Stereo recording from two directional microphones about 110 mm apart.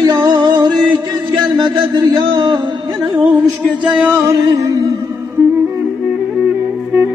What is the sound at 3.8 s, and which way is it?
Music, 10° right (ahead or behind).